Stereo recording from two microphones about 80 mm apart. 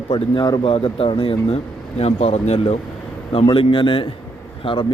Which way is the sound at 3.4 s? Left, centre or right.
Left.